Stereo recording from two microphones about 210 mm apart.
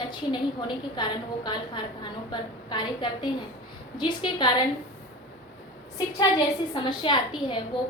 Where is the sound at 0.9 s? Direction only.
20° left (ahead or behind).